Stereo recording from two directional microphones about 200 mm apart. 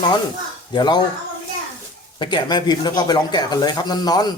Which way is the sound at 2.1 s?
25° left (ahead or behind).